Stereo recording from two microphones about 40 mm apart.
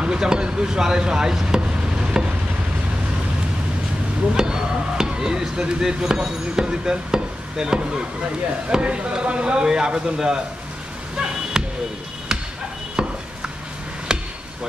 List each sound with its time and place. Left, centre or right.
0.0 s speech: centre
2.1 s a sound: centre
4.4 s speech: centre
8.6 s speech: right; by 10.4 s centre
11.6 s basketball bounce: centre
12.9 s a sound: centre
14.1 s basketball bounce: right